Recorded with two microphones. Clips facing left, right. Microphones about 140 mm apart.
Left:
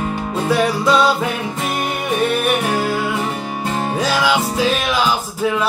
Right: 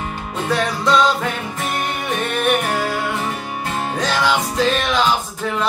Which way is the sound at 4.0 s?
10° left (ahead or behind).